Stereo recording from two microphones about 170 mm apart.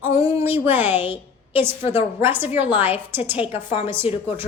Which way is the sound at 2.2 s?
10° right (ahead or behind).